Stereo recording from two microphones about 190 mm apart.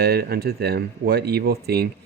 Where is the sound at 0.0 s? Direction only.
55° right (ahead or behind).